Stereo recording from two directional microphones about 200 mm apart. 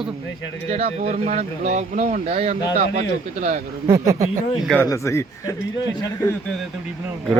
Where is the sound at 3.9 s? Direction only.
15° right (ahead or behind).